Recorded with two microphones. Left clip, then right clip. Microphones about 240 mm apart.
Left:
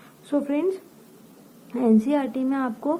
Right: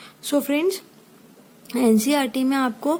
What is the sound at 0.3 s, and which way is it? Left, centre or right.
A woman's voice, right.